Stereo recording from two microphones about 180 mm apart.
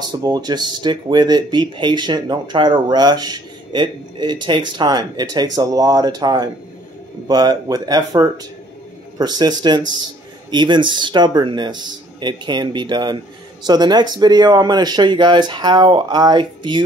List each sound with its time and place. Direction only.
0.2 s speech: 20° right (ahead or behind)